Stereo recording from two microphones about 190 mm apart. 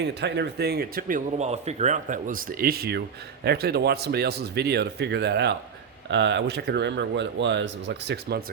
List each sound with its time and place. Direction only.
0.0 s speech: 60° right (ahead or behind)